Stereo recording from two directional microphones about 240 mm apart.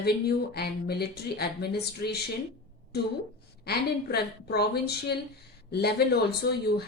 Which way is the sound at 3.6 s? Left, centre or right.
Left.